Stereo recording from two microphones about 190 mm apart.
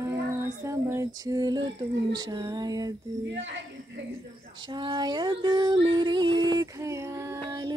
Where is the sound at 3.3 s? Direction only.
75° right (ahead or behind).